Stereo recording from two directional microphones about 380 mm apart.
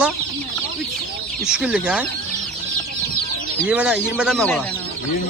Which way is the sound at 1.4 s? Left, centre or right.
Centre.